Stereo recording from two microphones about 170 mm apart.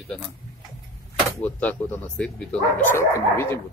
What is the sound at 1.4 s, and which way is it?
Speech, 10° left (ahead or behind).